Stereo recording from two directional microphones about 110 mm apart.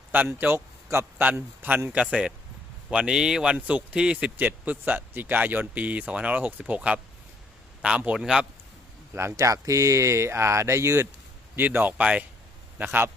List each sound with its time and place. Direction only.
0.1 s speech: 15° right (ahead or behind)
9.1 s speech: 25° right (ahead or behind)